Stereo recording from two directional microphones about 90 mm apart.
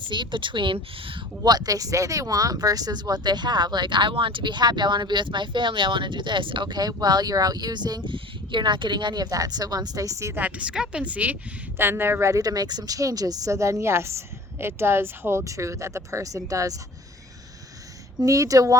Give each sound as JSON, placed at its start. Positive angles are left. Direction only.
{"t": 0.1, "sound": "speech", "side_deg": -60}
{"t": 1.5, "sound": "speech", "side_deg": -45}
{"t": 8.1, "sound": "speech", "side_deg": -60}
{"t": 10.3, "sound": "speech", "side_deg": -15}
{"t": 12.3, "sound": "speech", "side_deg": -40}
{"t": 18.2, "sound": "speech", "side_deg": -40}